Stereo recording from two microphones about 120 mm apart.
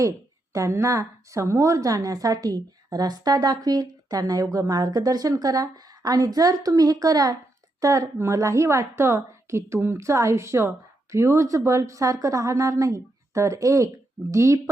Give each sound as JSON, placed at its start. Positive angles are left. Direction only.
{"t": 0.5, "sound": "a woman's voice", "side_deg": -25}